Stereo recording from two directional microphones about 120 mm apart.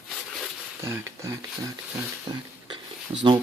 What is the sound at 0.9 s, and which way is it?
Speech, 25° right (ahead or behind).